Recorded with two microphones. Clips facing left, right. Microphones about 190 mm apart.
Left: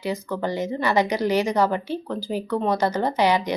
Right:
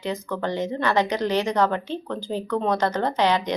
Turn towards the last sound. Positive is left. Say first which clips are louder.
# left 1 dB
turn(degrees=10)  # may be behind; listen again after turning